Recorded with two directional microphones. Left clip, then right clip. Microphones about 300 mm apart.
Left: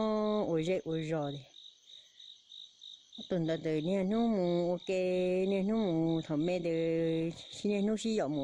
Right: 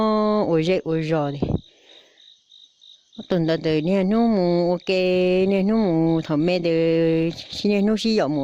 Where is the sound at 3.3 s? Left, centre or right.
Right.